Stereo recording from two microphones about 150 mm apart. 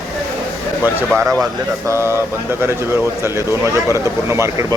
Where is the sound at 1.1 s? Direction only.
5° left (ahead or behind).